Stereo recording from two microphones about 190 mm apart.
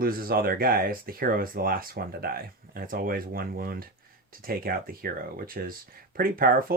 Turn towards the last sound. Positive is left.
turn(degrees=-50)  # may be behind; listen again after turning